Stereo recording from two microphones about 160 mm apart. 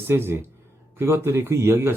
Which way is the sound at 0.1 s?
15° right (ahead or behind).